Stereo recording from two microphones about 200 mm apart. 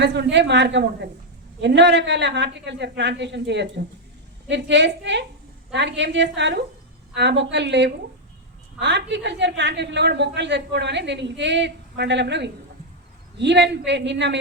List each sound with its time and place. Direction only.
0.0 s a woman's voice: 60° right (ahead or behind)